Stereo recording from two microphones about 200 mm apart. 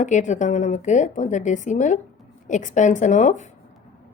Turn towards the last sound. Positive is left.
turn(degrees=35)  # may be behind; listen again after turning